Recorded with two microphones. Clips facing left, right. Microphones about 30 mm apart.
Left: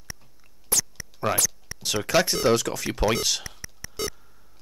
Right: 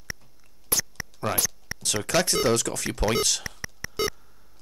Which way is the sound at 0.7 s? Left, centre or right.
Centre.